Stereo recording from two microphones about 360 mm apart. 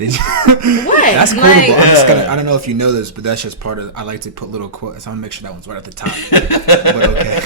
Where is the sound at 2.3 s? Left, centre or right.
Right.